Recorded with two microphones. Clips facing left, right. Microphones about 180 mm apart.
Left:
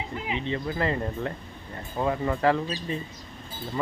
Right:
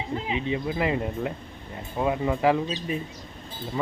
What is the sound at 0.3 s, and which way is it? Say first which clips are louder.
Speech: right 1 dB; 10° right (ahead or behind).